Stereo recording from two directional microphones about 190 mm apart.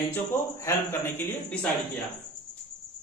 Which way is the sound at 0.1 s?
15° left (ahead or behind).